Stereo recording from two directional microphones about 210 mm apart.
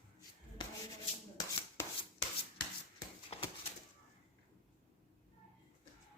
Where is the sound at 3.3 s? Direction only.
30° left (ahead or behind).